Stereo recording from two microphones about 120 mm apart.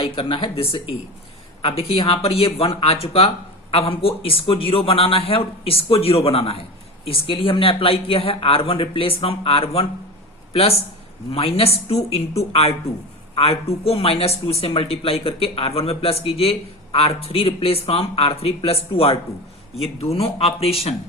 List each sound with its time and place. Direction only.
0.0 s a woman's voice: 45° left (ahead or behind)